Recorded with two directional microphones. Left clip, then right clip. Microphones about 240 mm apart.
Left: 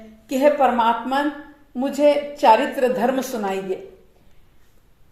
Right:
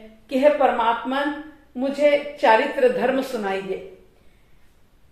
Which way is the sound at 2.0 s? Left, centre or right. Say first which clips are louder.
Left 2 dB; left.